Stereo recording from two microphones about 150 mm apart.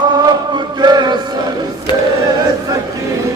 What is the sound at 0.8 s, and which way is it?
Music, 30° right (ahead or behind).